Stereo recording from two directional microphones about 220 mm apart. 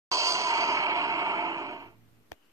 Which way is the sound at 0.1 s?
15° right (ahead or behind).